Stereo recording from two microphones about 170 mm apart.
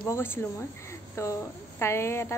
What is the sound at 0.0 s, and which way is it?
A woman's voice, 15° left (ahead or behind).